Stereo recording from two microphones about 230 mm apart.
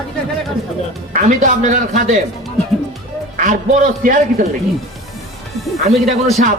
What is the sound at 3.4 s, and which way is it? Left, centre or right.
Speech, right.